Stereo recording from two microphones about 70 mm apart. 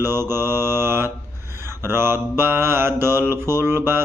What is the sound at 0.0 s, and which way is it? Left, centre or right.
Mantra, right.